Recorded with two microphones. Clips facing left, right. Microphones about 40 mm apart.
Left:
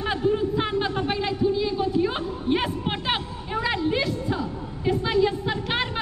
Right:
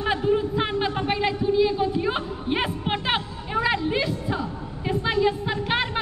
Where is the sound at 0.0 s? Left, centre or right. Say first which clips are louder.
Right 1 dB; centre.